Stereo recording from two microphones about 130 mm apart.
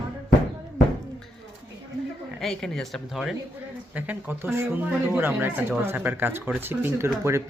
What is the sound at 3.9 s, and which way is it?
Speech, 10° right (ahead or behind).